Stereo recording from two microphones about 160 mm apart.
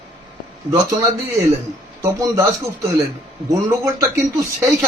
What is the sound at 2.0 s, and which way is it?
Speech, 20° right (ahead or behind).